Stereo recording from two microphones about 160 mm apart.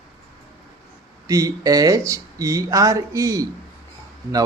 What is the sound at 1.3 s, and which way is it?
Speech, 20° right (ahead or behind).